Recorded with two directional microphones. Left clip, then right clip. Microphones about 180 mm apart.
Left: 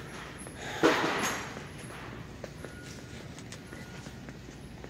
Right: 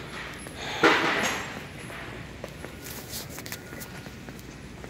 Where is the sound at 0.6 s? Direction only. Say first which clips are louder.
Right 5 dB; 25° left (ahead or behind).